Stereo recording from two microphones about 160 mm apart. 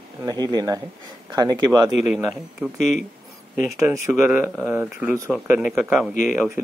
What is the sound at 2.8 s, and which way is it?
Speech, 50° left (ahead or behind).